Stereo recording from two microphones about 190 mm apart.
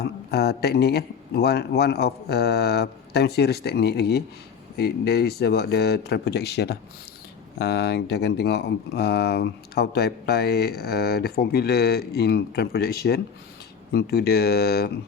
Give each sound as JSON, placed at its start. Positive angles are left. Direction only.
{"t": 0.0, "sound": "speech", "side_deg": 60}